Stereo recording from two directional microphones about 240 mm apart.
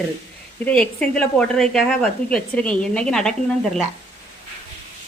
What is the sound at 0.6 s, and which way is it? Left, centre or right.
A woman's voice, centre.